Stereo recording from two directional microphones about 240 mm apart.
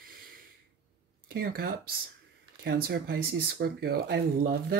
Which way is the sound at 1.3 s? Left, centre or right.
Right.